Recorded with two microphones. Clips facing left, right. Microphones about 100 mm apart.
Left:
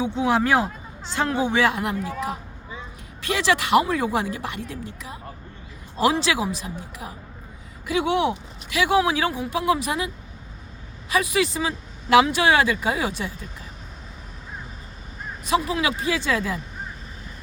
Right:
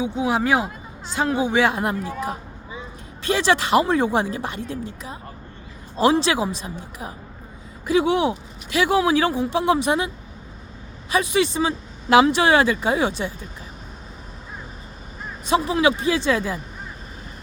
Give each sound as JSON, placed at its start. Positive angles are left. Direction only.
{"t": 0.0, "sound": "speech", "side_deg": -15}
{"t": 1.8, "sound": "speech", "side_deg": -30}
{"t": 3.2, "sound": "speech", "side_deg": -30}
{"t": 7.9, "sound": "speech", "side_deg": -30}
{"t": 11.1, "sound": "speech", "side_deg": -30}
{"t": 15.4, "sound": "speech", "side_deg": -30}